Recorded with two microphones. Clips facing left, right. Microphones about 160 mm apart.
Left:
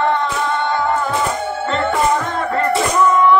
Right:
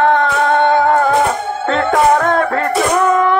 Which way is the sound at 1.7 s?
60° right (ahead or behind).